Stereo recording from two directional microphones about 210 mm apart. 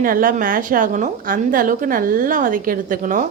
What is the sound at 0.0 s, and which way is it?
A woman's voice, 40° right (ahead or behind).